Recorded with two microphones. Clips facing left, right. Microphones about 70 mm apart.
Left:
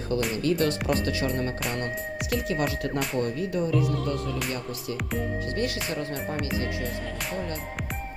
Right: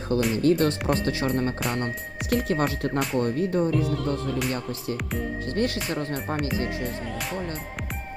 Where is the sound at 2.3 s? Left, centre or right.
Right.